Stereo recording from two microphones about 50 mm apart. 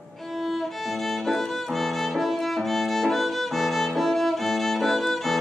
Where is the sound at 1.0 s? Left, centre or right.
Centre.